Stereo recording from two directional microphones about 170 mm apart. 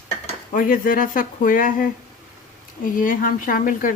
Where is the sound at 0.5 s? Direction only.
55° left (ahead or behind).